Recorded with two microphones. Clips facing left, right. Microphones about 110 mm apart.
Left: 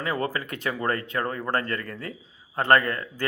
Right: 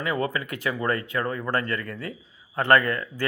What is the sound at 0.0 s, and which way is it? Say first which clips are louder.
Speech: right 1 dB; 35° left (ahead or behind).